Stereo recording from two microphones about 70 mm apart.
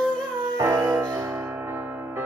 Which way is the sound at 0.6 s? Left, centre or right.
Right.